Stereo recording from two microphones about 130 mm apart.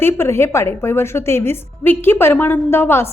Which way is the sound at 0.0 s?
20° left (ahead or behind).